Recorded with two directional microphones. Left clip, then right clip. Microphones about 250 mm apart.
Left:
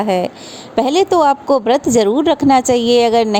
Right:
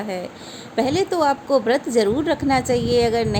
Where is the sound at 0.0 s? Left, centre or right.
Left.